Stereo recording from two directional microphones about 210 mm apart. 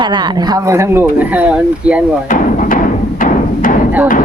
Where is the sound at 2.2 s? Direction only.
40° left (ahead or behind).